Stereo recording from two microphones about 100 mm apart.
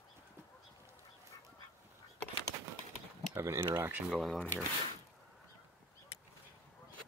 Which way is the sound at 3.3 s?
25° right (ahead or behind).